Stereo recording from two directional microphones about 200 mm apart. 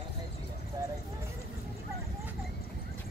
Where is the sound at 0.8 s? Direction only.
20° right (ahead or behind).